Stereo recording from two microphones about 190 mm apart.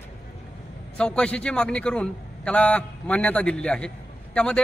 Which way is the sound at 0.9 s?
5° left (ahead or behind).